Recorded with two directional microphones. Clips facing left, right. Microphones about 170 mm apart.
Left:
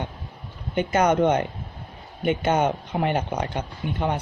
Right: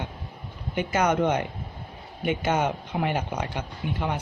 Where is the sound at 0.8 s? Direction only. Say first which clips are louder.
Left 3 dB; 30° left (ahead or behind).